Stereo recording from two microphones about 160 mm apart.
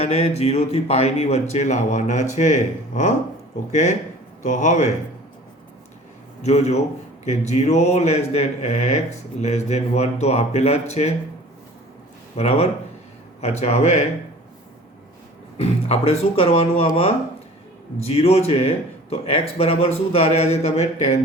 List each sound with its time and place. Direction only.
0.0 s speech: 40° left (ahead or behind)
6.4 s speech: 45° left (ahead or behind)
12.4 s a man's voice: 40° left (ahead or behind)
15.6 s a man's voice: 40° left (ahead or behind)